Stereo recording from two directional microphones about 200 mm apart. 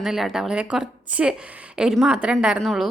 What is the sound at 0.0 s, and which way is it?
A woman's voice, centre (ahead or behind).